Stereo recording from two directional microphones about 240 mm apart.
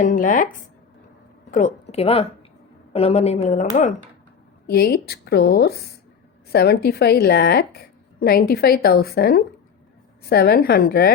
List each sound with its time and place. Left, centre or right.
0.0 s a woman's voice: left
1.5 s a woman's voice: left
4.6 s a woman's voice: left